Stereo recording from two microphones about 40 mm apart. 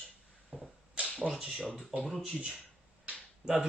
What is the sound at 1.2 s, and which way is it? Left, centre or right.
Speech, right.